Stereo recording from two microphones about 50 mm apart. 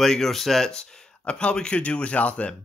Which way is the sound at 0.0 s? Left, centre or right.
Centre.